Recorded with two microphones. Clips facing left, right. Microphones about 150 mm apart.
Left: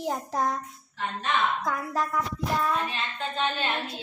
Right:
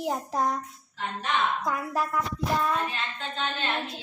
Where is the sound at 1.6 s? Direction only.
10° right (ahead or behind).